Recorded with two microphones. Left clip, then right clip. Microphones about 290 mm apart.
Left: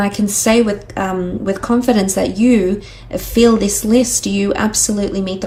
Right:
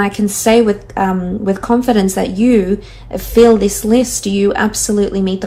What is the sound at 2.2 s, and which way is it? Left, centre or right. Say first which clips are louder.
Speech: even; left.